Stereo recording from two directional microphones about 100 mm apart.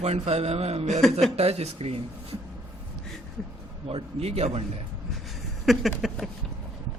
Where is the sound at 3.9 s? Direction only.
80° right.